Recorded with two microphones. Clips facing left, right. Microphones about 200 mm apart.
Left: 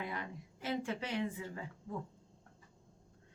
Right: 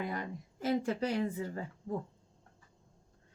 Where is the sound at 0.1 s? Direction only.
40° right (ahead or behind).